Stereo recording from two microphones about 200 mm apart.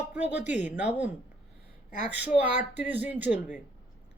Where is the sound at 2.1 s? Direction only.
10° right (ahead or behind).